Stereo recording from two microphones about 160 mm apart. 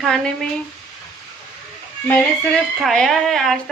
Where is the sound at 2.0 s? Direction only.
10° left (ahead or behind).